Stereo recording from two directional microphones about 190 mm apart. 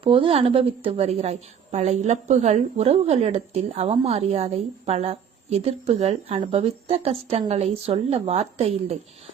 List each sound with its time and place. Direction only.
0.0 s a woman's voice: 25° right (ahead or behind)